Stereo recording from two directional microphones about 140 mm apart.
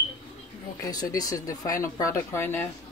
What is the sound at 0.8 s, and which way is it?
Speech, 25° left (ahead or behind).